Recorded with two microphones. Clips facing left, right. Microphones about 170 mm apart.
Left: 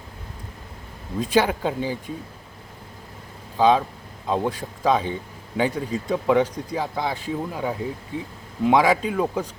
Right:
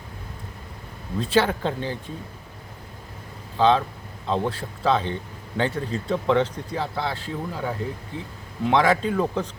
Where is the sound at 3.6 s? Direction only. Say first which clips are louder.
Left 1 dB; 10° left (ahead or behind).